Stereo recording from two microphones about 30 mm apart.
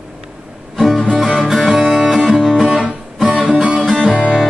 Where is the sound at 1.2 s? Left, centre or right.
Centre.